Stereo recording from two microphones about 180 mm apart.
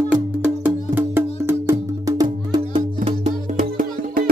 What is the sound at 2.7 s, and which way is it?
Music, 35° right (ahead or behind).